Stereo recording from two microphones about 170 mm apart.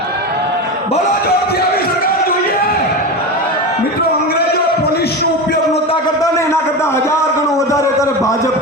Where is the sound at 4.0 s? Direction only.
65° left (ahead or behind).